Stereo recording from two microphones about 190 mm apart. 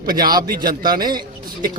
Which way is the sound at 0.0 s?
50° right (ahead or behind).